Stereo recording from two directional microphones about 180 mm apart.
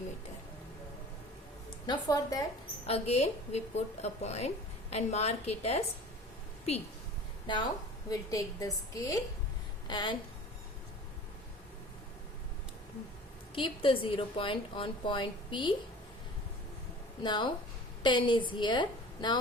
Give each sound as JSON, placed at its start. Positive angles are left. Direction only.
{"t": 1.9, "sound": "a woman's voice", "side_deg": 20}
{"t": 2.8, "sound": "a woman's voice", "side_deg": 35}
{"t": 7.5, "sound": "a woman's voice", "side_deg": 25}
{"t": 13.6, "sound": "a woman's voice", "side_deg": 30}
{"t": 17.2, "sound": "a woman's voice", "side_deg": 25}